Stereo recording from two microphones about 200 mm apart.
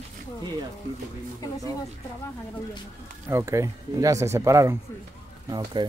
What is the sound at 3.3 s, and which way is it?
Speech, 15° right (ahead or behind).